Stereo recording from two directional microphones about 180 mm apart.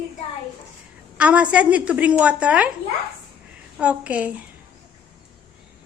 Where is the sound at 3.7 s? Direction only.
5° right (ahead or behind).